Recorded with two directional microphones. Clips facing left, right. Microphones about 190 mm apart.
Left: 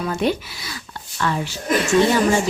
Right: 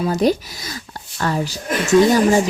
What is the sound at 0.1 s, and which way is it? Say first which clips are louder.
Speech: right 3 dB; 40° right (ahead or behind).